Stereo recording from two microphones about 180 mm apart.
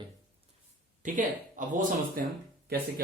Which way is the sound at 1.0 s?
45° right (ahead or behind).